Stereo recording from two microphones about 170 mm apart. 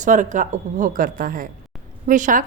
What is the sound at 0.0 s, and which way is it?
A woman's voice, 50° right (ahead or behind).